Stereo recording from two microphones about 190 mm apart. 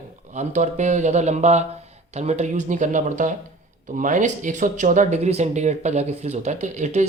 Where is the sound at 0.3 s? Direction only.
40° right (ahead or behind).